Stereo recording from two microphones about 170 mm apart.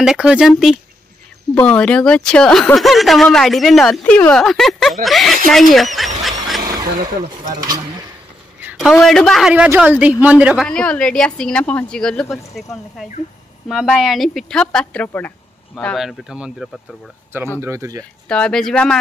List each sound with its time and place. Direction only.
0.0 s speech: 5° right (ahead or behind)
6.6 s a sound: 20° right (ahead or behind)
8.5 s a sound: 5° right (ahead or behind)
9.0 s a woman's voice: centre (ahead or behind)
13.7 s speech: centre (ahead or behind)
17.6 s a woman's voice: 15° right (ahead or behind)
18.3 s speech: 5° left (ahead or behind)